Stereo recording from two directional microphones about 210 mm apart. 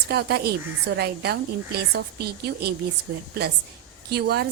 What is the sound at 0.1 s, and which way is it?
A woman's voice, 50° right (ahead or behind).